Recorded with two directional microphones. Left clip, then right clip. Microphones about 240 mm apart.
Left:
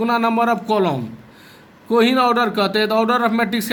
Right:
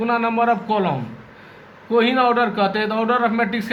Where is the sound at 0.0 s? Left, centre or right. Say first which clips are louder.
Left 1 dB; left.